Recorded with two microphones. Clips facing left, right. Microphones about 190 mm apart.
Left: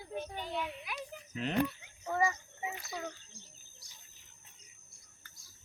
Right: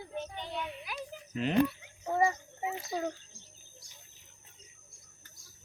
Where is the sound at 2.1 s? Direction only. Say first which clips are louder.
Right 3 dB; 25° right (ahead or behind).